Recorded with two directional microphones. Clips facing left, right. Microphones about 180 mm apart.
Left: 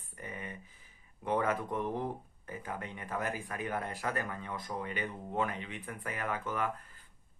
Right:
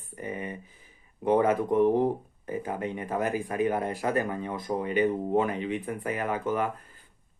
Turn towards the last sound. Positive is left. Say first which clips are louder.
# right 7 dB
turn(degrees=-20)  # may be behind; listen again after turning